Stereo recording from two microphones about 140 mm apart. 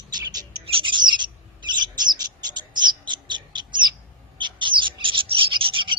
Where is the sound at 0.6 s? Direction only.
40° right (ahead or behind).